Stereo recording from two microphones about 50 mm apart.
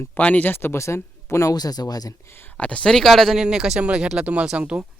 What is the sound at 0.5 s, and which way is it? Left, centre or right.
Speech, left.